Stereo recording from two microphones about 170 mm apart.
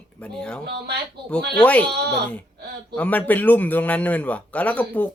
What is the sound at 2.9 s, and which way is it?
A man's voice, 10° left (ahead or behind).